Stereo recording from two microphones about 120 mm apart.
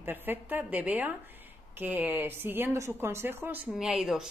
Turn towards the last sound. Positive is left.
turn(degrees=-5)  # may be behind; listen again after turning